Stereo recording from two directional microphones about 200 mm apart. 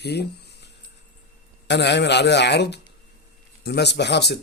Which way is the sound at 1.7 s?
60° left (ahead or behind).